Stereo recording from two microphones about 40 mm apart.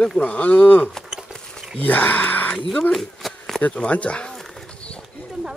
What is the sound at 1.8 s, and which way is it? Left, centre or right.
Speech, left.